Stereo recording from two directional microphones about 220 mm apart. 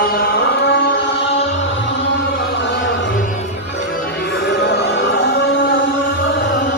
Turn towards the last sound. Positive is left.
turn(degrees=45)  # may be behind; listen again after turning